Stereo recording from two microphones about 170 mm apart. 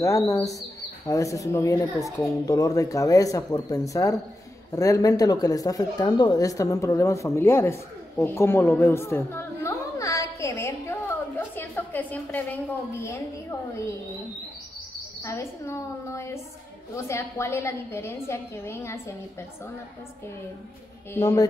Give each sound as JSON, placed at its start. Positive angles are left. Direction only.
{"t": 0.0, "sound": "a woman's voice", "side_deg": 20}
{"t": 15.2, "sound": "a woman's voice", "side_deg": 15}
{"t": 21.1, "sound": "speech", "side_deg": 20}